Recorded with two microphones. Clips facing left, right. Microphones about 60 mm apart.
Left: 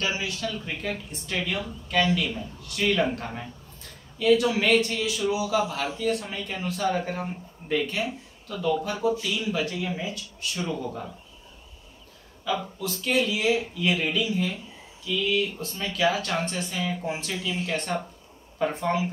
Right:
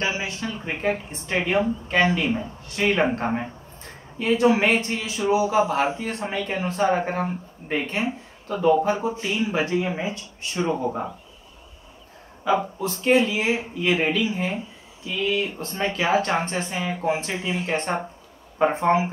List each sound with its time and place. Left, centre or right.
0.0 s speech: right
12.4 s speech: right